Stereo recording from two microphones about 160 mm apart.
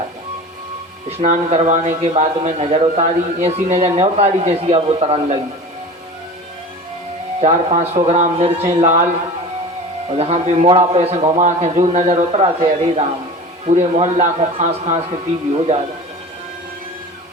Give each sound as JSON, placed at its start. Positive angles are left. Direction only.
{"t": 1.2, "sound": "a man's voice", "side_deg": -45}
{"t": 7.4, "sound": "a man's voice", "side_deg": -40}
{"t": 10.1, "sound": "a man's voice", "side_deg": -40}